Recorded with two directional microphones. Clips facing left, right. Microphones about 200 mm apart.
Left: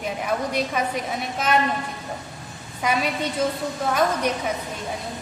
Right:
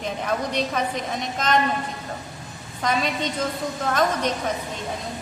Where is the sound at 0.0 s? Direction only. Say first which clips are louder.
Even; 10° left (ahead or behind).